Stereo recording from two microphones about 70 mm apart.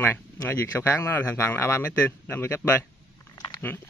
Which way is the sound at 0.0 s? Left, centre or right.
Left.